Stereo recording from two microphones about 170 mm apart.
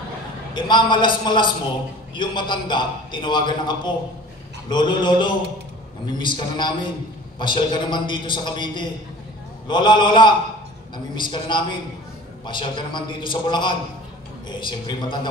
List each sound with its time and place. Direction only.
0.6 s a man's voice: 25° left (ahead or behind)